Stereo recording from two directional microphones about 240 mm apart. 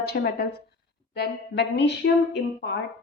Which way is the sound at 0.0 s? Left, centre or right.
Left.